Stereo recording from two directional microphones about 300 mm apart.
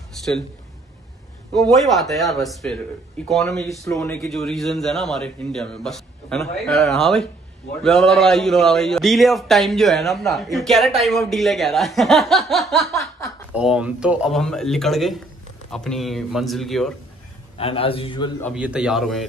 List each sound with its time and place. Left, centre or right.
1.5 s a man's voice: centre
17.6 s a man's voice: centre
18.5 s a man's voice: centre